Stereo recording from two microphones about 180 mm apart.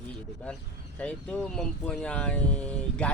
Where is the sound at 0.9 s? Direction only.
5° left (ahead or behind).